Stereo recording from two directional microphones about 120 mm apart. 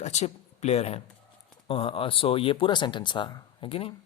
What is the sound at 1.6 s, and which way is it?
Speech, 45° left (ahead or behind).